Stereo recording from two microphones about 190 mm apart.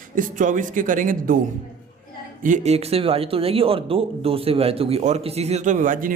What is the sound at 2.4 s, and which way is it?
A man's voice, 40° right (ahead or behind).